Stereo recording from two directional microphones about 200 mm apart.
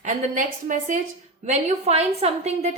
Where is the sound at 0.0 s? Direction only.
40° right (ahead or behind).